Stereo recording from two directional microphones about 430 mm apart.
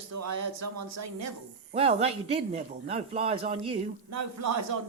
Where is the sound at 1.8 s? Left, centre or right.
Centre.